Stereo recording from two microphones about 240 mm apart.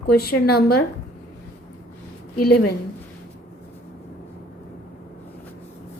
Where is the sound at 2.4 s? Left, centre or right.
Left.